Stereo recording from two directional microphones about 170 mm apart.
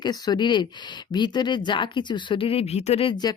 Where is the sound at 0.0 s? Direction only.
25° left (ahead or behind).